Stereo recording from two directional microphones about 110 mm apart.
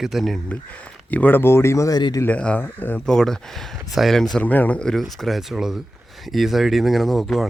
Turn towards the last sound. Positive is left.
turn(degrees=0)  # may be behind; listen again after turning